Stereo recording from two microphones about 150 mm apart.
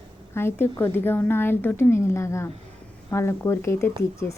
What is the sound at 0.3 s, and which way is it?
A woman's voice, 15° left (ahead or behind).